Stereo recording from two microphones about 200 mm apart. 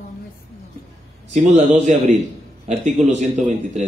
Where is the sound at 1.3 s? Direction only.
35° right (ahead or behind).